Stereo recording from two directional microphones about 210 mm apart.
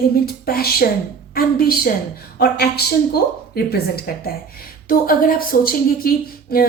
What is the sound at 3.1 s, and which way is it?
Speech, 45° left (ahead or behind).